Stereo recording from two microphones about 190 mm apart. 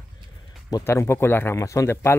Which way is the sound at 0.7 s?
15° left (ahead or behind).